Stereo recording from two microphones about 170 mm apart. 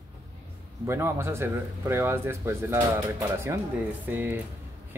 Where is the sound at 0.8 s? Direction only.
15° right (ahead or behind).